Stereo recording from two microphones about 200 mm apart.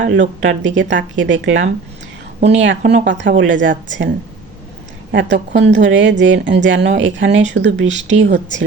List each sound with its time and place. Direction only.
0.1 s a woman's voice: 65° right (ahead or behind)
5.1 s a woman's voice: 60° right (ahead or behind)